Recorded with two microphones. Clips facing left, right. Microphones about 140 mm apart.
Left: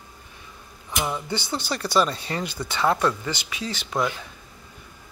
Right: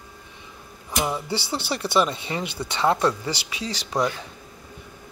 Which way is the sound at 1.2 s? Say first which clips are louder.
Right 1 dB; 30° right (ahead or behind).